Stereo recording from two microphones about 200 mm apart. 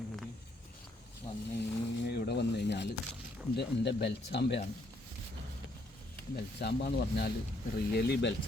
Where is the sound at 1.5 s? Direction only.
55° left (ahead or behind).